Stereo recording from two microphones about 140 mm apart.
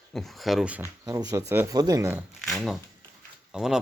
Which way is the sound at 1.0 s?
25° right (ahead or behind).